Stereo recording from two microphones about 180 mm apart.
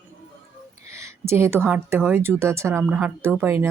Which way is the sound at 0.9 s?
15° right (ahead or behind).